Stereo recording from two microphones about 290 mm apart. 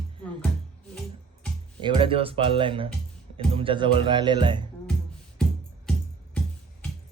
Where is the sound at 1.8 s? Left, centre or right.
Centre.